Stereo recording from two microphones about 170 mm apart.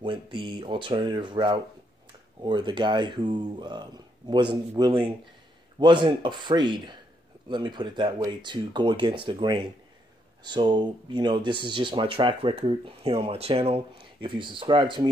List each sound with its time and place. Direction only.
0.0 s speech: 30° right (ahead or behind)